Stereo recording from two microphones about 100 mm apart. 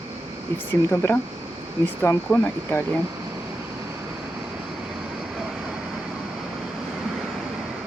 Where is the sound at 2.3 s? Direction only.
20° left (ahead or behind).